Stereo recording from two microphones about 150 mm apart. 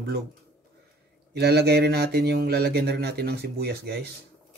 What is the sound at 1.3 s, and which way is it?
Speech, 90° right.